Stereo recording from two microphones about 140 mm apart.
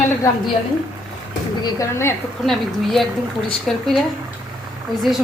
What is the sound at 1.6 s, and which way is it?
Speech, 20° left (ahead or behind).